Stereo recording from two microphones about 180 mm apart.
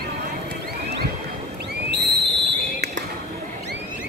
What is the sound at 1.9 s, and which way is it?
Fireworks, 75° right (ahead or behind).